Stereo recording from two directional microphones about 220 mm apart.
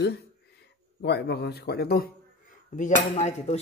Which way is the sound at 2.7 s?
35° left (ahead or behind).